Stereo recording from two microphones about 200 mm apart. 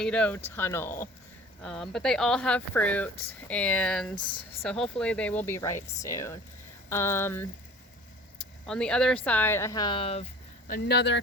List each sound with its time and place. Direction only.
0.0 s speech: 5° left (ahead or behind)
4.1 s speech: 25° left (ahead or behind)
4.6 s speech: 5° left (ahead or behind)
8.6 s speech: 5° left (ahead or behind); by 10.2 s 30° left (ahead or behind)
10.7 s speech: 55° left (ahead or behind)